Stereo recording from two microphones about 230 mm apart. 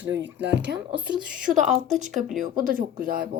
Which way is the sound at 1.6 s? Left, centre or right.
Right.